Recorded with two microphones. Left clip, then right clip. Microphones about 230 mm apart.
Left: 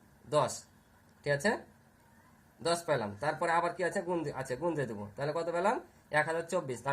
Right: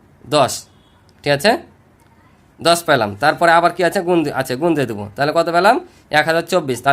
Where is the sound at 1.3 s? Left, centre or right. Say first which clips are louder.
Right 16 dB; right.